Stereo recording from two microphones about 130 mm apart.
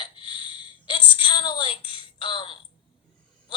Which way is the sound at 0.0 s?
40° left (ahead or behind).